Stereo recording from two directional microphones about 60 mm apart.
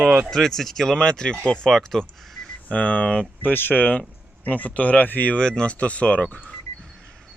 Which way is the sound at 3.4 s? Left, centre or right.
Left.